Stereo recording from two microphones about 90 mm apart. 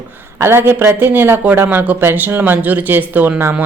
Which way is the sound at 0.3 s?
25° right (ahead or behind).